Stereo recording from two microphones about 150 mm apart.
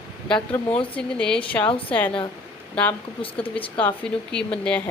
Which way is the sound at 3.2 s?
35° left (ahead or behind).